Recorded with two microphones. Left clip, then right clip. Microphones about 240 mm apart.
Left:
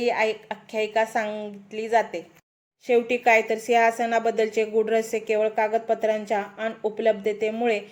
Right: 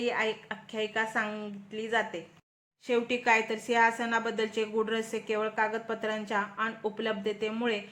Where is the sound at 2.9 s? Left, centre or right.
Centre.